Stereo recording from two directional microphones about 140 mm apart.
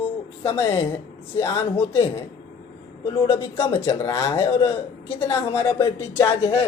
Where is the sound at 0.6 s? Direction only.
40° left (ahead or behind).